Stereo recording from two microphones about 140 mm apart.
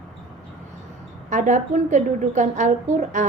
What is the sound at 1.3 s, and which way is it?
A woman's voice, 60° right (ahead or behind).